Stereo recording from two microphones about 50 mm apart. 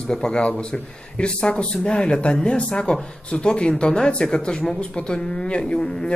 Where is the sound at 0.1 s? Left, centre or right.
Centre.